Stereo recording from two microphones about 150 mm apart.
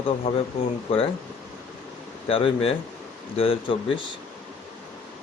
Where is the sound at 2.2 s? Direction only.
40° left (ahead or behind).